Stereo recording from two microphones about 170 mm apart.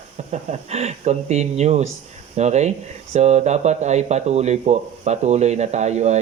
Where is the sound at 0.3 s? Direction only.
40° right (ahead or behind).